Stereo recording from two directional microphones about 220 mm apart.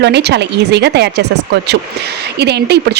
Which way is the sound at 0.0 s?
50° right (ahead or behind).